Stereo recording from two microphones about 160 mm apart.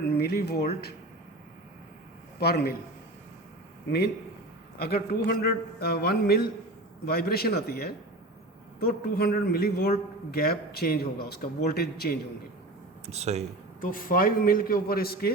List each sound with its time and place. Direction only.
0.0 s speech: 80° left
2.4 s a man's voice: 80° left
4.8 s a man's voice: 70° left (ahead or behind)
13.1 s speech: 45° right (ahead or behind)
13.8 s a man's voice: 60° left (ahead or behind)